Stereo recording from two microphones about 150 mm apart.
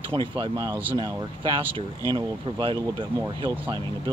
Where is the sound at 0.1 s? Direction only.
35° right (ahead or behind).